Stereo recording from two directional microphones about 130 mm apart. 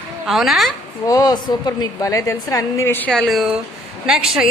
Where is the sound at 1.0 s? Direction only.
30° left (ahead or behind).